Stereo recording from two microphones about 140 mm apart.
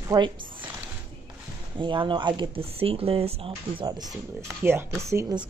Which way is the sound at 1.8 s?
35° right (ahead or behind).